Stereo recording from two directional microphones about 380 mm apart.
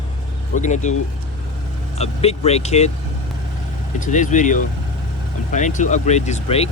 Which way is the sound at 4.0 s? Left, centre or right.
Centre.